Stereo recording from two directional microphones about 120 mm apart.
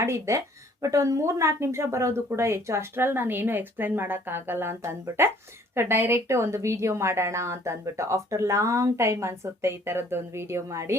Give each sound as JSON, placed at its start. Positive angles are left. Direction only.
{"t": 0.0, "sound": "speech", "side_deg": -25}